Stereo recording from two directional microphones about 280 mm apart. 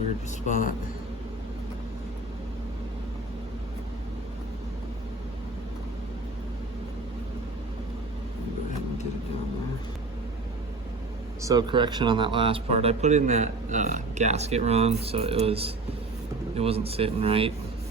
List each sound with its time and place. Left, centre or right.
0.4 s a man's voice: left
11.4 s a man's voice: centre